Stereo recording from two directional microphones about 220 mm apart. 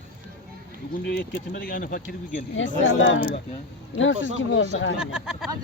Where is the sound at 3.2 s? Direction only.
25° left (ahead or behind).